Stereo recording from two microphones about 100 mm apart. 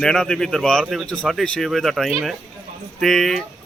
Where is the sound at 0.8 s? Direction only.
5° right (ahead or behind).